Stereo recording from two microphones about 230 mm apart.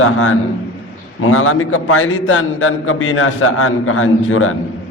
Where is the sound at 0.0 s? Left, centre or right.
Left.